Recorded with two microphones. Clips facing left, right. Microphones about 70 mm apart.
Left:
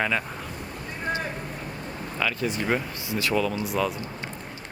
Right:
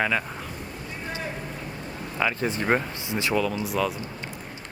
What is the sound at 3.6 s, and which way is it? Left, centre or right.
Speech, centre.